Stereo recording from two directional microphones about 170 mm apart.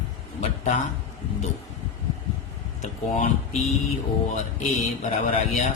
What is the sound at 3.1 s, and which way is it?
Speech, 45° left (ahead or behind).